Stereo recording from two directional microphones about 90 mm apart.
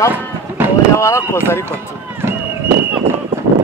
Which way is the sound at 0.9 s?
30° left (ahead or behind).